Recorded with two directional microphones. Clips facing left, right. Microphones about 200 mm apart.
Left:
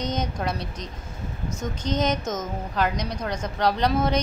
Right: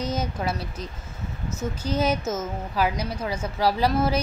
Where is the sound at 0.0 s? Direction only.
5° right (ahead or behind).